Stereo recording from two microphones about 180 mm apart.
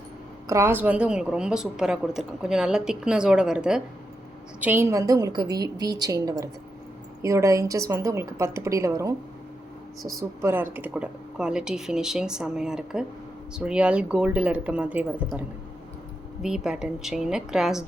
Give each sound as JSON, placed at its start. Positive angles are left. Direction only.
{"t": 0.4, "sound": "a woman's voice", "side_deg": -15}